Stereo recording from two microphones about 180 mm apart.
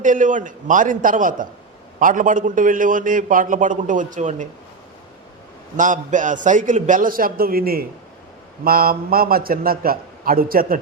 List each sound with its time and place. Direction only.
0.0 s a man's voice: 45° right (ahead or behind)
5.7 s a man's voice: 45° right (ahead or behind)